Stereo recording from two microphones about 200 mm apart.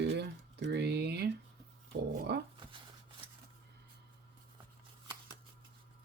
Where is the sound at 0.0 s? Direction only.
60° right (ahead or behind).